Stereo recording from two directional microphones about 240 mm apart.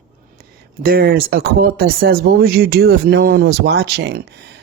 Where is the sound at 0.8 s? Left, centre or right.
Right.